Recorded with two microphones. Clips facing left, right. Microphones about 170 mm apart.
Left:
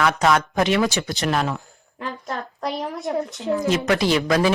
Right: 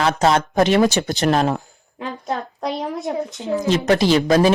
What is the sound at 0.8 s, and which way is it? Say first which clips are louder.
Speech: right 5 dB; 45° right (ahead or behind).